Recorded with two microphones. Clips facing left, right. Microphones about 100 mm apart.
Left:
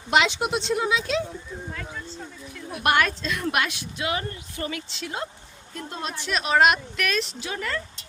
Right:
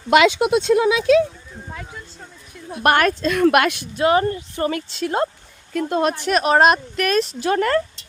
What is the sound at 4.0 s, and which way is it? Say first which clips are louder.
Speech: right 12 dB; 40° right (ahead or behind).